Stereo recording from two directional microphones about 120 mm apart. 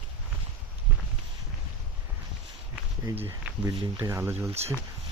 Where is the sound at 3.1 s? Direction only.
20° right (ahead or behind).